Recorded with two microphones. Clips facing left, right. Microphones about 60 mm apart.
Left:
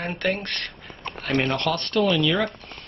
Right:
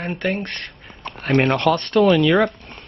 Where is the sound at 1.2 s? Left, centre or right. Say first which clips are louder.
Right 6 dB; right.